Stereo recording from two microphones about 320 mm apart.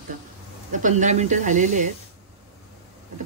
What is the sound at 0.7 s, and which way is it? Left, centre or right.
Speech, right.